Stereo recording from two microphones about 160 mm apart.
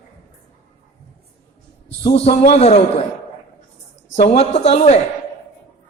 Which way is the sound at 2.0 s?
40° left (ahead or behind).